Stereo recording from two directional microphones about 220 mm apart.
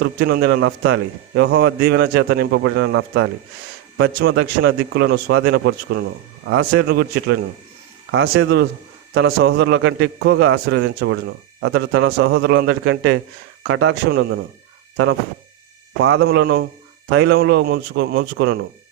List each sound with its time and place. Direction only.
0.0 s a man's voice: 45° right (ahead or behind)
16.0 s a man's voice: 60° right (ahead or behind)